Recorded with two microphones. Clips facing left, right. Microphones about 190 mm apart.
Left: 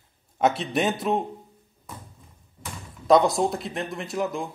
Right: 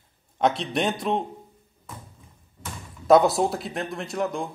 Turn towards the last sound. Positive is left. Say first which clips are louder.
# even
turn(degrees=0)  # may be behind; listen again after turning